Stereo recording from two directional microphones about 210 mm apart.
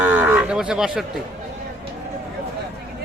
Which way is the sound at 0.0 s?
10° right (ahead or behind).